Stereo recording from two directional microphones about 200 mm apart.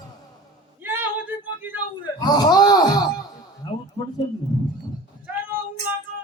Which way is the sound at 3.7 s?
35° left (ahead or behind).